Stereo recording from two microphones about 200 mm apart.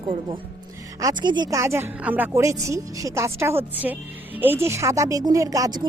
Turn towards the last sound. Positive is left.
turn(degrees=-15)  # may be behind; listen again after turning